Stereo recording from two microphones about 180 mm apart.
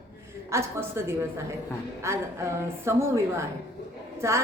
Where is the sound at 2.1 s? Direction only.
15° right (ahead or behind).